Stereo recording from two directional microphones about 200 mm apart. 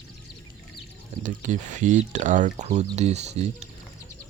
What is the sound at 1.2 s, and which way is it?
Speech, 40° right (ahead or behind).